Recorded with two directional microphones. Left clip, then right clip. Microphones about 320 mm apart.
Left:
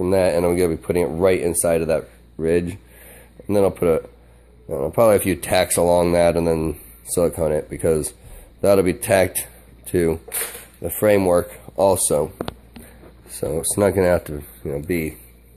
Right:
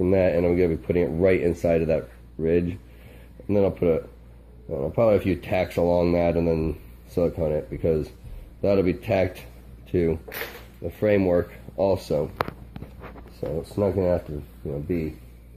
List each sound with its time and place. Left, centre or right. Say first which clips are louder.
0.0 s speech: left 3 dB; centre
13.6 s speech: left 6 dB; left